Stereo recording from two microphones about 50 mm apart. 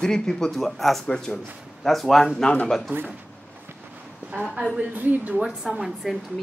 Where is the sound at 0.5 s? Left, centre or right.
Centre.